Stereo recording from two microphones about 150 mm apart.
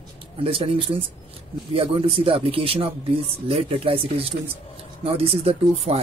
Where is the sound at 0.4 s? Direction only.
35° right (ahead or behind).